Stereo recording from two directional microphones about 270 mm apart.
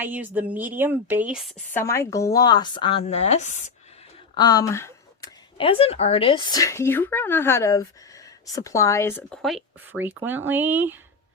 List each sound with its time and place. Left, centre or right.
0.0 s speech: centre; by 3.7 s left
4.4 s speech: centre